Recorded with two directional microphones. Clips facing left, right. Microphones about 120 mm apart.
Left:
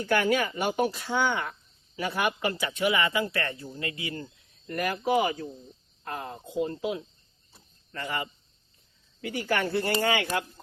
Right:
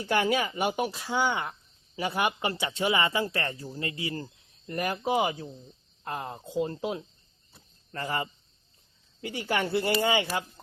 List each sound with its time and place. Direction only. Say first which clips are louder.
0.1 s speech: left 1 dB; 20° right (ahead or behind)